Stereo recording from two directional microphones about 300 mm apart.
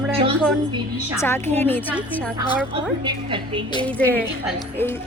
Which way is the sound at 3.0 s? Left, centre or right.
Centre.